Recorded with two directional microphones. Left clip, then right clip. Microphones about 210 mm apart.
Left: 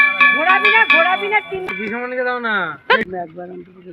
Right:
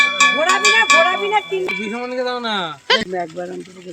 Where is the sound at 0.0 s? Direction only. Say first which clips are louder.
Left 2 dB; 75° right (ahead or behind).